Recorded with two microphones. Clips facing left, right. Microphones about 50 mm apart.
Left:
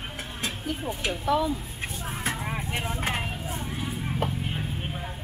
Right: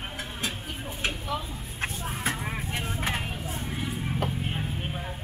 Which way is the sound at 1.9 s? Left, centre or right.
Centre.